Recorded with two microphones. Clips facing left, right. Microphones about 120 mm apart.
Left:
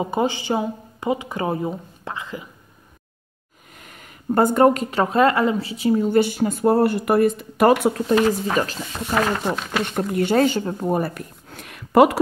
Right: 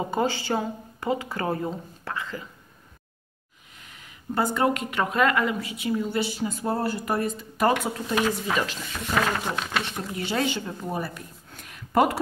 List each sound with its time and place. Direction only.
0.0 s speech: 20° left (ahead or behind)
3.7 s speech: 55° left (ahead or behind); by 6.0 s 35° left (ahead or behind)
6.0 s speech: 50° left (ahead or behind); by 7.7 s 70° left (ahead or behind)
8.5 s speech: 40° left (ahead or behind)
9.1 s speech: 10° left (ahead or behind)
9.8 s speech: 55° left (ahead or behind)
11.4 s a sound: 75° left (ahead or behind); by 12.2 s 90° left